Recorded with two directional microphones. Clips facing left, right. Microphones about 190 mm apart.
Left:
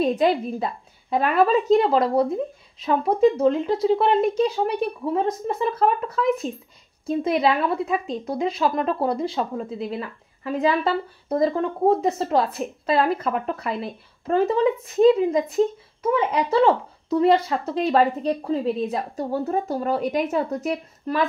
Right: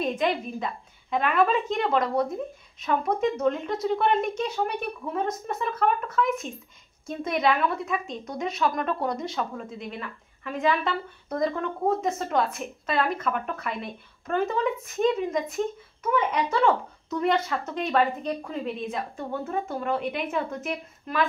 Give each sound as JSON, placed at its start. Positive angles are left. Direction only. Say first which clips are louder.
{"t": 0.0, "sound": "a woman's voice", "louder": "left 6 dB", "side_deg": 35}